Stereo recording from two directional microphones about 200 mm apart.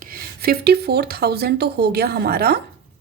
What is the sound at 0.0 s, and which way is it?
A woman's voice, 50° right (ahead or behind).